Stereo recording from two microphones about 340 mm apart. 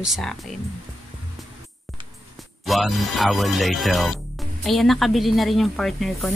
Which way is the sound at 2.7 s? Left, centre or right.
Centre.